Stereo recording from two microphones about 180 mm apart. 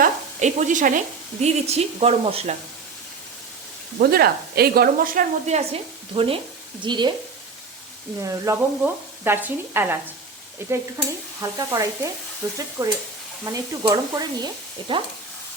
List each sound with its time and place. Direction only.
0.0 s sizzle: 45° right (ahead or behind)
1.4 s speech: 40° right (ahead or behind)
4.0 s speech: 60° right (ahead or behind)
5.5 s speech: 35° right (ahead or behind)
6.8 s stir: 25° right (ahead or behind)
8.2 s speech: 15° right (ahead or behind)
11.5 s stir: 20° right (ahead or behind)